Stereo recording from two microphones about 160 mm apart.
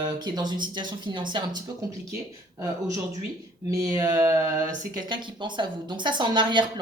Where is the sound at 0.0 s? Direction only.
25° right (ahead or behind).